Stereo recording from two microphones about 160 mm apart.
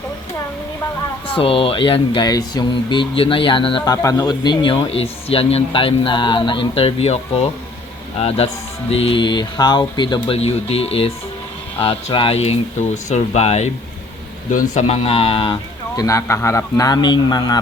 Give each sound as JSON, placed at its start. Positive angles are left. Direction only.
{"t": 1.3, "sound": "speech", "side_deg": 35}
{"t": 3.9, "sound": "speech", "side_deg": 20}
{"t": 14.8, "sound": "speech", "side_deg": 40}
{"t": 16.0, "sound": "speech", "side_deg": 20}